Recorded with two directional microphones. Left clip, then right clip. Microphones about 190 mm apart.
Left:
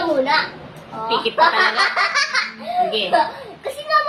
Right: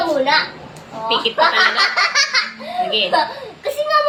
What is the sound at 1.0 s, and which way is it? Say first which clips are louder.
Speech: right 1 dB; 10° left (ahead or behind).